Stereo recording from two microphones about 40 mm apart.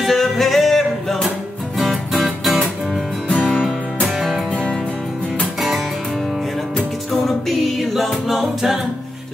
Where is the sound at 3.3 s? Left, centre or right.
Left.